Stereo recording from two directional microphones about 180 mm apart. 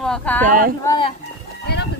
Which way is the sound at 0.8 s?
25° left (ahead or behind).